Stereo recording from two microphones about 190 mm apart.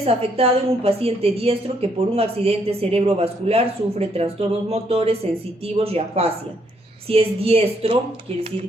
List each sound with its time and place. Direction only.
0.0 s a woman's voice: 30° right (ahead or behind)